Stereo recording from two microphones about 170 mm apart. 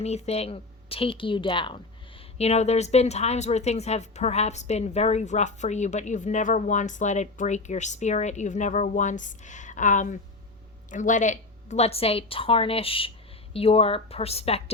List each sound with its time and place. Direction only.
0.0 s a woman's voice: 40° left (ahead or behind)
2.4 s a woman's voice: 40° left (ahead or behind)